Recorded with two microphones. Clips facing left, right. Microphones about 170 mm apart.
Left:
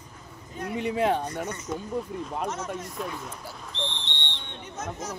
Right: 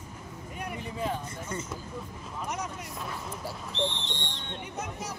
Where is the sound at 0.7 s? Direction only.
75° left (ahead or behind).